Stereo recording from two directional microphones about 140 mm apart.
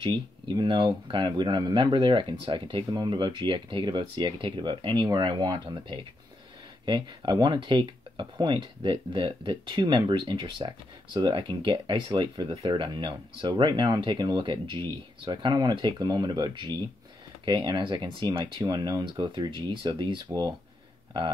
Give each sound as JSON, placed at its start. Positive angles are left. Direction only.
{"t": 0.0, "sound": "speech", "side_deg": -35}